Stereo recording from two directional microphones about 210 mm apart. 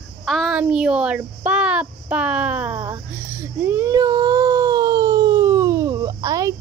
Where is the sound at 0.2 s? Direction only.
Centre (ahead or behind).